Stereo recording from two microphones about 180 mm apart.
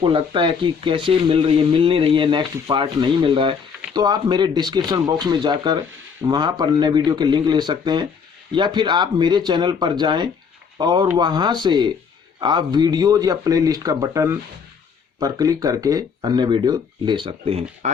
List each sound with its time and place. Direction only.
0.0 s speech: 30° right (ahead or behind)